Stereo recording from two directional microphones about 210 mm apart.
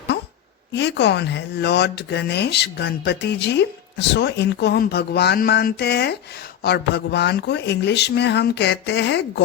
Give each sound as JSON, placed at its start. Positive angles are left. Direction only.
{"t": 0.7, "sound": "speech", "side_deg": 55}